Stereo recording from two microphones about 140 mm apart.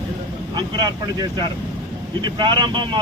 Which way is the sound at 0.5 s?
30° right (ahead or behind).